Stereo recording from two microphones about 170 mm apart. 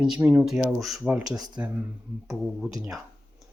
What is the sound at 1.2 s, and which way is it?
Speech, 20° right (ahead or behind).